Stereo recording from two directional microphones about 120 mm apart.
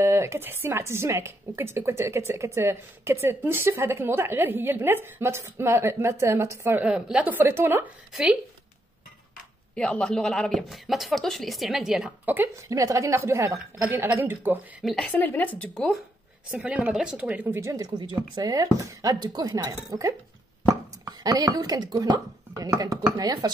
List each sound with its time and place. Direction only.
0.0 s speech: 20° right (ahead or behind)
6.8 s a woman's voice: 10° right (ahead or behind)
8.1 s speech: 5° right (ahead or behind)
9.8 s speech: 10° left (ahead or behind)
12.6 s a woman's voice: 25° right (ahead or behind)
14.8 s speech: centre (ahead or behind)
15.1 s speech: 15° left (ahead or behind)
16.4 s a woman's voice: 10° right (ahead or behind); by 23.5 s 35° right (ahead or behind)